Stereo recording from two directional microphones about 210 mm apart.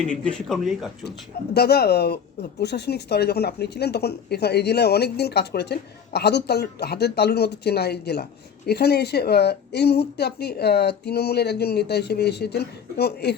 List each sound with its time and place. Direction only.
0.1 s speech: 5° left (ahead or behind)
1.5 s speech: 50° left (ahead or behind)